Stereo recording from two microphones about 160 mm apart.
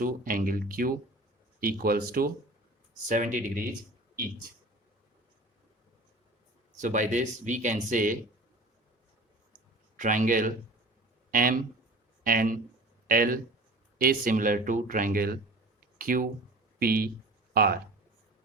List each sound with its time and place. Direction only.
0.0 s speech: 60° right (ahead or behind)
3.1 s speech: 55° right (ahead or behind)
6.7 s speech: 50° right (ahead or behind)
10.0 s speech: 55° right (ahead or behind); by 17.7 s 70° right (ahead or behind)